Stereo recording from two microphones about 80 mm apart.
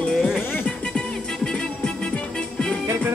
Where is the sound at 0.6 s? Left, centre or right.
Centre.